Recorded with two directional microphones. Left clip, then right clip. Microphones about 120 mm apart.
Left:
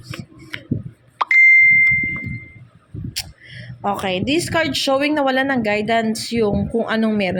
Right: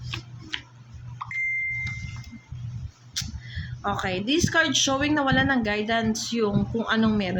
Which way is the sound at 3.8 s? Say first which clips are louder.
Left 6 dB; 45° left (ahead or behind).